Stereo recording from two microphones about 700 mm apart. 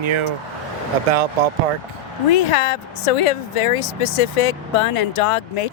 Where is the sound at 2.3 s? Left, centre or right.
Left.